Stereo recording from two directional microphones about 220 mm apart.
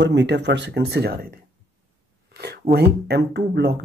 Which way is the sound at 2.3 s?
50° right (ahead or behind).